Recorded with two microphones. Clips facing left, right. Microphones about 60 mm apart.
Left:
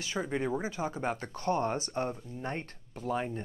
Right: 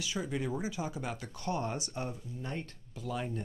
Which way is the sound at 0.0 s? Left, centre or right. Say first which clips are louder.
Left 3 dB; left.